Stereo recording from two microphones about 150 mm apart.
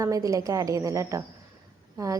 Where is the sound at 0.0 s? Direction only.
20° right (ahead or behind).